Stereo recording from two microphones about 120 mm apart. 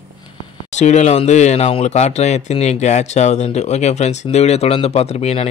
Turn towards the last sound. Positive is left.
turn(degrees=60)  # may be behind; listen again after turning